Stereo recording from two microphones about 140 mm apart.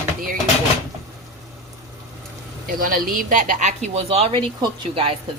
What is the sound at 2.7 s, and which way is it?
A woman's voice, 90° right.